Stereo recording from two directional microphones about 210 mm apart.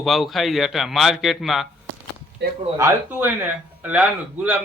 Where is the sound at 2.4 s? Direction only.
55° right (ahead or behind).